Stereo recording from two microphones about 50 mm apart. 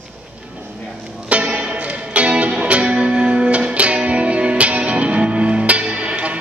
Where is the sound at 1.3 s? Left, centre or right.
Right.